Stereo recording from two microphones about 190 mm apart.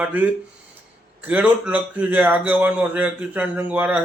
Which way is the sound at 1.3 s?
5° right (ahead or behind).